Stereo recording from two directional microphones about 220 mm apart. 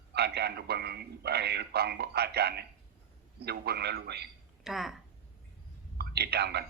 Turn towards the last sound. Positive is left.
turn(degrees=-45)  # may be behind; listen again after turning